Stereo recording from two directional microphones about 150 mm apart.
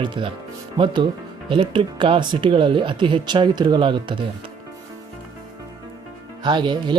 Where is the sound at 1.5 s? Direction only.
35° right (ahead or behind).